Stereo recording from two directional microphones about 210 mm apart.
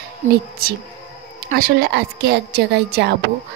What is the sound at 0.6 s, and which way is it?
A woman's voice, 45° right (ahead or behind).